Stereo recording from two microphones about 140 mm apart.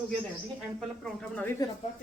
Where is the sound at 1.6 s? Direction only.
25° left (ahead or behind).